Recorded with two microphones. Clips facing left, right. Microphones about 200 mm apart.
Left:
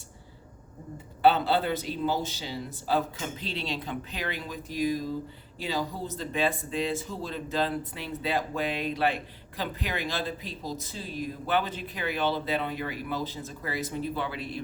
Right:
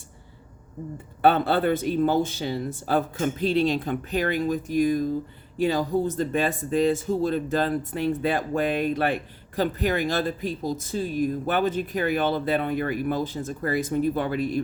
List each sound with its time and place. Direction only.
1.2 s speech: 55° right (ahead or behind)